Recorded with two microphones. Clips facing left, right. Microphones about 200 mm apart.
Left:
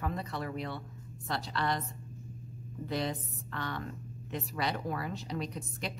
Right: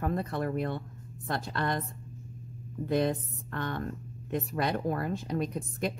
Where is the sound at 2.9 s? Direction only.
50° right (ahead or behind).